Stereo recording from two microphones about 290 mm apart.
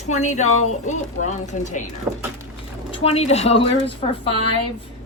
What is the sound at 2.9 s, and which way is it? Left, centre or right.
A woman's voice, left.